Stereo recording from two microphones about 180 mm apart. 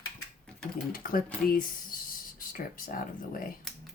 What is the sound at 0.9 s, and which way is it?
Speech, 55° left (ahead or behind).